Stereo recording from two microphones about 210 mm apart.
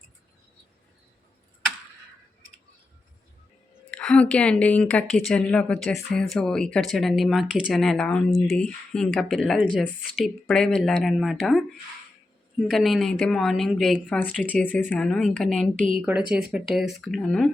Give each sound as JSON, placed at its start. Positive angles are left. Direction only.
{"t": 3.9, "sound": "speech", "side_deg": 5}